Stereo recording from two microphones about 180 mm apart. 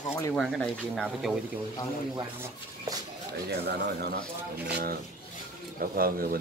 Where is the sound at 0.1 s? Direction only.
15° left (ahead or behind).